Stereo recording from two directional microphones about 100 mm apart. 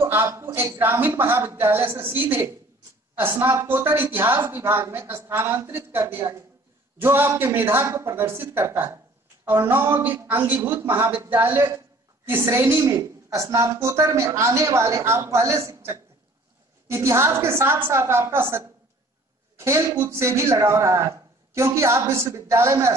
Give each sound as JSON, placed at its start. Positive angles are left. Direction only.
{"t": 0.0, "sound": "a woman's voice", "side_deg": -25}
{"t": 19.5, "sound": "a sound", "side_deg": -25}
{"t": 20.1, "sound": "speech", "side_deg": -25}